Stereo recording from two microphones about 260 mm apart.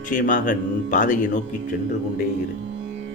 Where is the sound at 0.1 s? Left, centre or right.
Left.